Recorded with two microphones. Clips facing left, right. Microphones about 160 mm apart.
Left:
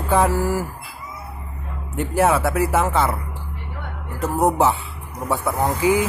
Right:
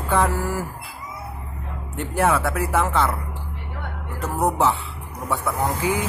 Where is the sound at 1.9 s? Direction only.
5° left (ahead or behind).